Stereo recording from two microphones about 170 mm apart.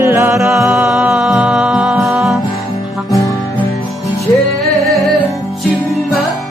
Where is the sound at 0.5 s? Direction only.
Centre (ahead or behind).